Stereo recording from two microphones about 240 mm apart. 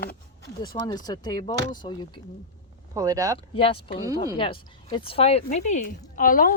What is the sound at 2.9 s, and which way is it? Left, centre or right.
Speech, centre.